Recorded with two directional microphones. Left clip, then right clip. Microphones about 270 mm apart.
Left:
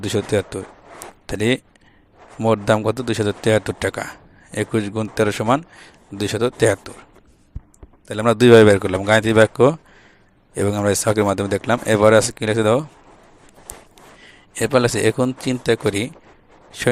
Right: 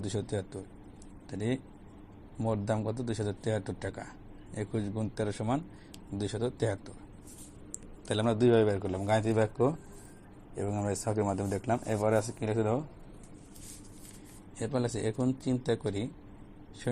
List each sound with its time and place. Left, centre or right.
0.0 s speech: left
8.0 s speech: left
9.5 s speech: left
14.5 s speech: left